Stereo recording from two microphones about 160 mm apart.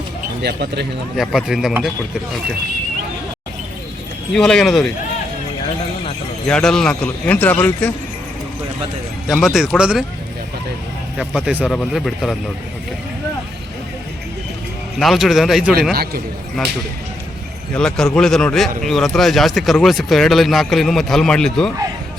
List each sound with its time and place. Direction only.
0.4 s speech: 90° right
1.1 s speech: centre (ahead or behind)
4.3 s speech: 5° left (ahead or behind)
6.5 s a man's voice: 5° left (ahead or behind)
9.3 s speech: centre (ahead or behind)
11.2 s speech: 5° right (ahead or behind)
14.9 s speech: centre (ahead or behind)
15.9 s a man's voice: 70° right (ahead or behind)
16.6 s speech: centre (ahead or behind)
17.7 s speech: 5° left (ahead or behind)